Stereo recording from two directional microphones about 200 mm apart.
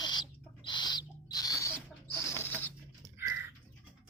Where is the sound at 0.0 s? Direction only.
20° left (ahead or behind).